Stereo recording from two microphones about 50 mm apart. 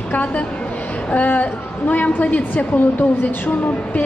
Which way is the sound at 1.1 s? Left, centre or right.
Left.